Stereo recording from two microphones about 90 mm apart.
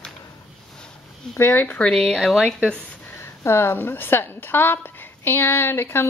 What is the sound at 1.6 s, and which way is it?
Speech, 10° left (ahead or behind).